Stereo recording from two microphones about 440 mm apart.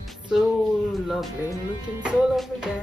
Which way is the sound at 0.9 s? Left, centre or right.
Centre.